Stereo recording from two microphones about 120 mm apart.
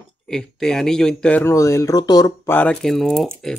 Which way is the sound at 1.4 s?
20° left (ahead or behind).